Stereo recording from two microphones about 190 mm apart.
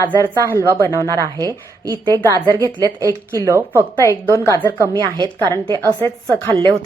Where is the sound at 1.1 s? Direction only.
20° right (ahead or behind).